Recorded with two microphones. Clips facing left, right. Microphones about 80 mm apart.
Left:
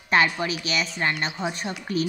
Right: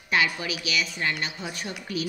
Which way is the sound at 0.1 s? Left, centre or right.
Left.